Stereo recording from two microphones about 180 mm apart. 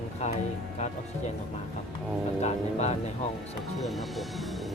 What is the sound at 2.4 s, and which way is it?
Speech, 40° left (ahead or behind).